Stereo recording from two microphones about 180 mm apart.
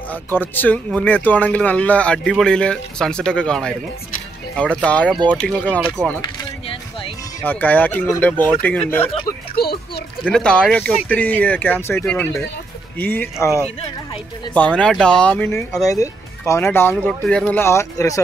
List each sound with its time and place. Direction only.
0.1 s speech: 10° left (ahead or behind)
4.7 s speech: 5° left (ahead or behind)
7.4 s speech: 10° left (ahead or behind)
9.6 s speech: 60° left (ahead or behind)
10.2 s speech: 5° left (ahead or behind)
14.5 s speech: 5° left (ahead or behind)